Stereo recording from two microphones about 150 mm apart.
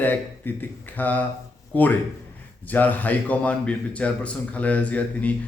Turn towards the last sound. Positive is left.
turn(degrees=10)  # may be behind; listen again after turning